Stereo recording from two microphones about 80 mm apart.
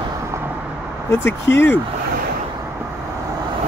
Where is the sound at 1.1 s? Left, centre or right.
Left.